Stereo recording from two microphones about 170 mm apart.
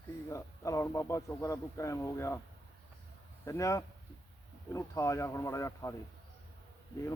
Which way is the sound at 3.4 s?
20° left (ahead or behind).